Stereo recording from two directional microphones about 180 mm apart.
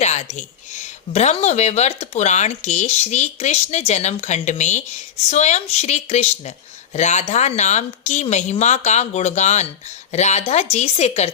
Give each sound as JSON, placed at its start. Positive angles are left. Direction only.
{"t": 0.0, "sound": "speech", "side_deg": 40}